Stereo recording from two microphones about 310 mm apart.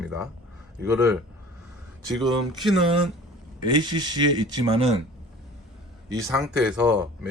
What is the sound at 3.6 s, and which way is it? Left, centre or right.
Speech, centre.